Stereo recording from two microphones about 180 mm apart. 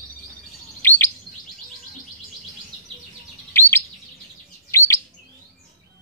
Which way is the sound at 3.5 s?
10° left (ahead or behind).